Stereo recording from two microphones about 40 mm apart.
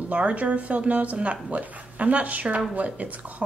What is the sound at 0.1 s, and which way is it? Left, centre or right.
A woman's voice, right.